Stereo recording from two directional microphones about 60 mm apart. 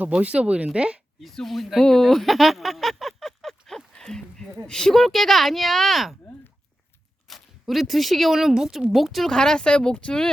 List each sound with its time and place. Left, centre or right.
0.2 s speech: right
1.2 s speech: centre
7.3 s speech: centre